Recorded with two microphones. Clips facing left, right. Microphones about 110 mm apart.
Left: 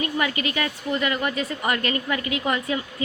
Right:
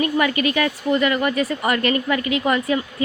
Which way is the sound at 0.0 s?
65° right (ahead or behind).